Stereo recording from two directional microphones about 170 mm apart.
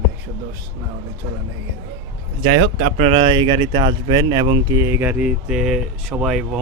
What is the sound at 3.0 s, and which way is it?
Speech, 30° right (ahead or behind).